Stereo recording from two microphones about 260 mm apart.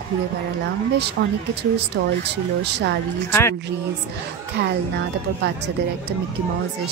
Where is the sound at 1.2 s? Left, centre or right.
Right.